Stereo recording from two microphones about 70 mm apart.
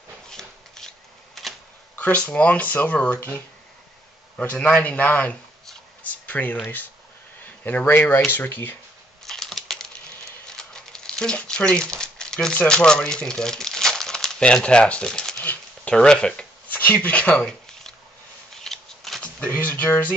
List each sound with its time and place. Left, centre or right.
0.3 s shuffling cards: centre
2.0 s speech: left
9.2 s typing: centre
10.4 s a sound: centre
12.5 s speech: centre
15.3 s a sound: left
15.9 s speech: centre
16.6 s speech: left
17.5 s a sound: centre
18.5 s scissors: centre
19.2 s speech: centre